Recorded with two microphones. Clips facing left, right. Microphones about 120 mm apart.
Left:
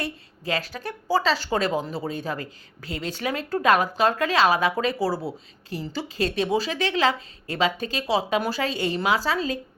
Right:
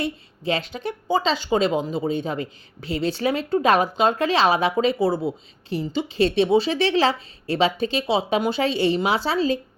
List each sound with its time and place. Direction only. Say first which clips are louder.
0.0 s a woman's voice: right 5 dB; 25° right (ahead or behind)